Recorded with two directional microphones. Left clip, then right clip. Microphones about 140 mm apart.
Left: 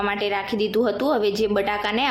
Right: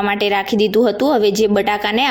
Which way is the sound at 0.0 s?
50° right (ahead or behind).